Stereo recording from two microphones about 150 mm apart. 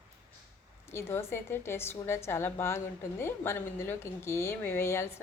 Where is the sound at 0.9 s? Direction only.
15° left (ahead or behind).